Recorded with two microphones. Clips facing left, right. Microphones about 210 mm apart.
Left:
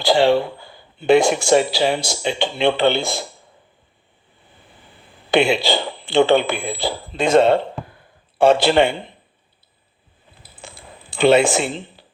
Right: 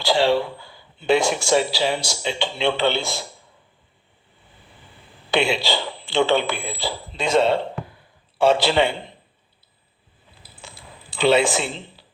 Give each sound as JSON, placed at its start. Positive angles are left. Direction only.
{"t": 0.0, "sound": "speech", "side_deg": 55}
{"t": 5.3, "sound": "speech", "side_deg": 55}
{"t": 10.5, "sound": "a sound", "side_deg": 50}